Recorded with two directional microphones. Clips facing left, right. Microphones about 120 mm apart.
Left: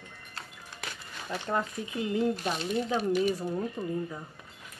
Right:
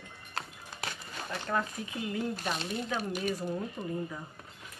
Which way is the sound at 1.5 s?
25° left (ahead or behind).